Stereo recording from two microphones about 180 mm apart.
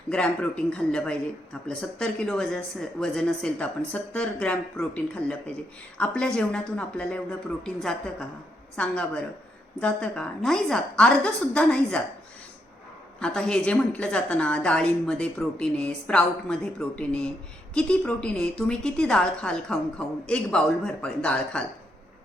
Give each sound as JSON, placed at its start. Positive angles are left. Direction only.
{"t": 0.1, "sound": "a woman's voice", "side_deg": 5}
{"t": 13.1, "sound": "a woman's voice", "side_deg": 5}